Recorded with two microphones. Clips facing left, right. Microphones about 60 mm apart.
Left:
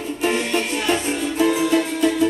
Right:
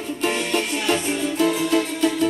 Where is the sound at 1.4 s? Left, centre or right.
Centre.